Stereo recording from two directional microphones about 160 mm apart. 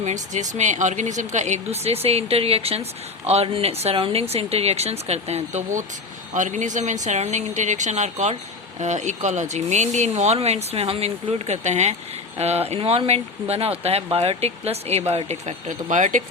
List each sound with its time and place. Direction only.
0.0 s speech: 50° right (ahead or behind)